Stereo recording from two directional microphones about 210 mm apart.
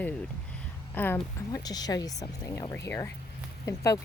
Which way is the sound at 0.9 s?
10° left (ahead or behind).